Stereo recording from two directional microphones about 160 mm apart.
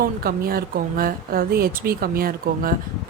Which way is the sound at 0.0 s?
70° right (ahead or behind).